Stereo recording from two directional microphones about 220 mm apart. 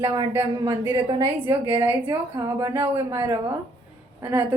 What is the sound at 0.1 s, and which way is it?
A woman's voice, 15° right (ahead or behind).